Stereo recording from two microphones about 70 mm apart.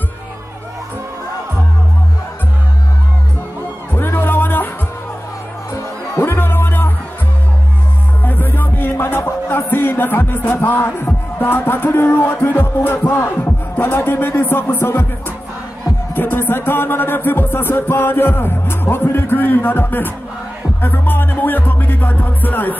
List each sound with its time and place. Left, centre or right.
3.9 s music: left
6.1 s music: left
8.2 s music: left